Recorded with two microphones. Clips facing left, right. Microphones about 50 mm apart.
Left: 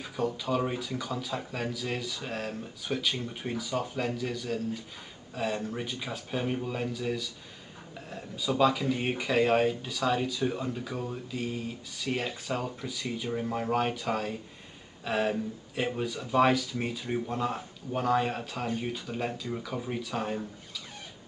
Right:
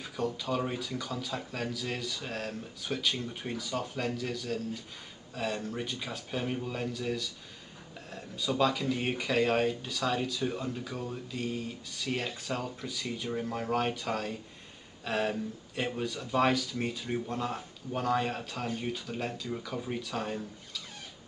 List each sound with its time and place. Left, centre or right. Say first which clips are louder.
0.0 s speech: left 2 dB; centre